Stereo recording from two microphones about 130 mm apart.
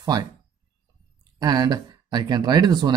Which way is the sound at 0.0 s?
30° right (ahead or behind).